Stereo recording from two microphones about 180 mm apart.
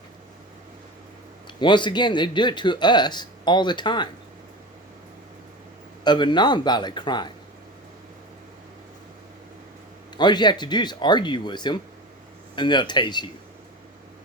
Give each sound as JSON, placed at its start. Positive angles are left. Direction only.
{"t": 1.5, "sound": "speech", "side_deg": 25}
{"t": 6.1, "sound": "speech", "side_deg": 25}
{"t": 10.2, "sound": "speech", "side_deg": 25}